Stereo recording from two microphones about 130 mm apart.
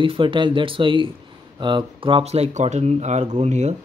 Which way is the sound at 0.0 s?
40° right (ahead or behind).